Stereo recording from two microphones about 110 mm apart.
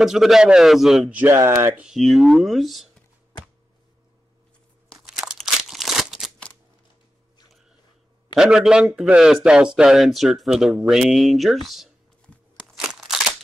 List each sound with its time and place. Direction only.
0.0 s a man's voice: 5° right (ahead or behind)
1.1 s speech: 20° right (ahead or behind)
1.8 s a man's voice: centre (ahead or behind)
4.9 s crunch: 5° right (ahead or behind)
8.4 s a man's voice: 5° right (ahead or behind)
12.5 s crunch: centre (ahead or behind)